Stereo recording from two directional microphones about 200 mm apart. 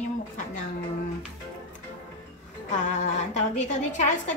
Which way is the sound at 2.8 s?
35° left (ahead or behind).